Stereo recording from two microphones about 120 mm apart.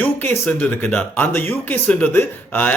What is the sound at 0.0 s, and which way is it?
Speech, 15° left (ahead or behind).